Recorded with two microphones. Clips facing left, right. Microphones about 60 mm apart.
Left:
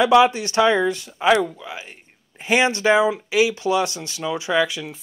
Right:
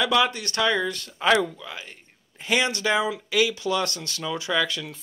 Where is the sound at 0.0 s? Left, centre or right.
Left.